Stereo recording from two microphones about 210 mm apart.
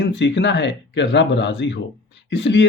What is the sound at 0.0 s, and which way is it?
Speech, 55° left (ahead or behind).